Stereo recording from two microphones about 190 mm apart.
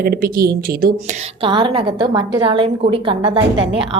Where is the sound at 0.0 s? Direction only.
50° right (ahead or behind).